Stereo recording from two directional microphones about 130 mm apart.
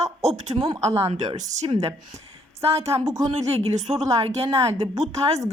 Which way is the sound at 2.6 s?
50° right (ahead or behind).